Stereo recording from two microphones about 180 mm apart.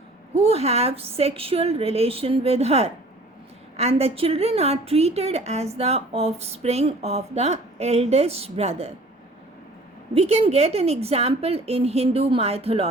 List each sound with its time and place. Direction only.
0.3 s a woman's voice: 35° right (ahead or behind)
10.2 s a woman's voice: 35° right (ahead or behind)